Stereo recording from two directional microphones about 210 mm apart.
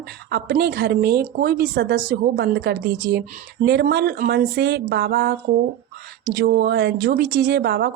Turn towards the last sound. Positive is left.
turn(degrees=-50)  # may be behind; listen again after turning